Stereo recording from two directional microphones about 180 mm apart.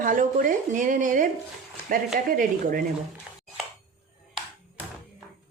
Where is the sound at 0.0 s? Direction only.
50° right (ahead or behind).